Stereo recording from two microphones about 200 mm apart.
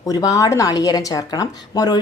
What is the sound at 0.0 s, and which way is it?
A woman's voice, 15° left (ahead or behind).